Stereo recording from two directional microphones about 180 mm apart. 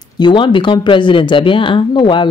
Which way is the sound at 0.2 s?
25° left (ahead or behind).